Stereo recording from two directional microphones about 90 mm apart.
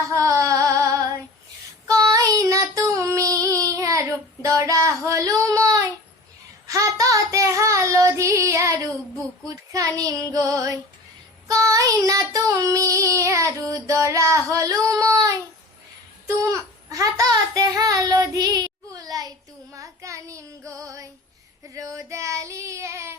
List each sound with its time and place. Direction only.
0.1 s female singing: 35° right (ahead or behind)
1.9 s child singing: 40° right (ahead or behind)